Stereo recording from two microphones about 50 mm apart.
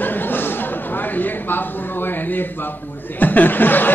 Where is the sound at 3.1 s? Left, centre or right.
Left.